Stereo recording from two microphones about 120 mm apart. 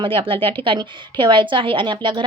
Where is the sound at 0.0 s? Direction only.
45° right (ahead or behind).